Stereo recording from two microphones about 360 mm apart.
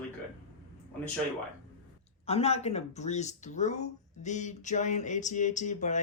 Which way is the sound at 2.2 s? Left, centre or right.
Centre.